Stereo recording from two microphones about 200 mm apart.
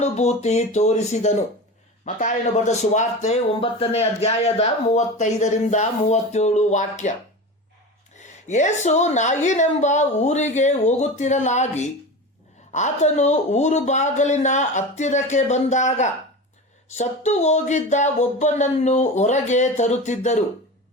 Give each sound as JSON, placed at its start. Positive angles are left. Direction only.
{"t": 0.0, "sound": "speech", "side_deg": 35}
{"t": 8.4, "sound": "speech", "side_deg": 35}